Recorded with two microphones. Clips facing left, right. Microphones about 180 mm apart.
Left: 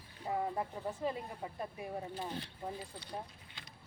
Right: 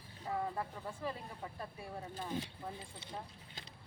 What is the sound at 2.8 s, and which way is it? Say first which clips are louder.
Speech: left 3 dB; 25° right (ahead or behind).